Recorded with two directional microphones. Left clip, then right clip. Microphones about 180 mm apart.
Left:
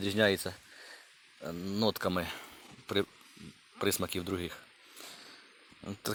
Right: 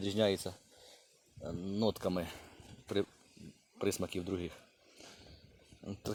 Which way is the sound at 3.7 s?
5° left (ahead or behind).